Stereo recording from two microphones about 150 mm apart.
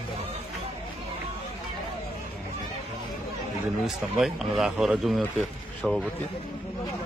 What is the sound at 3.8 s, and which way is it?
Speech, centre (ahead or behind).